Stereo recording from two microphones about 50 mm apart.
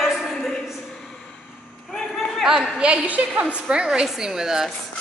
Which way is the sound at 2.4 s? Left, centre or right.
Centre.